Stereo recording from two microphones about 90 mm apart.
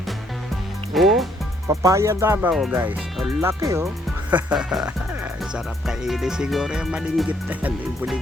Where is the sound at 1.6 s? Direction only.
35° right (ahead or behind).